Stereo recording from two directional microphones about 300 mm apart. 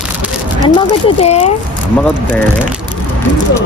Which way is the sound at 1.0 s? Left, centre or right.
Centre.